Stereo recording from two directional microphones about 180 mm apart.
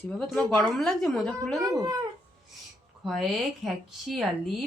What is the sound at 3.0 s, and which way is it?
Speech, centre (ahead or behind).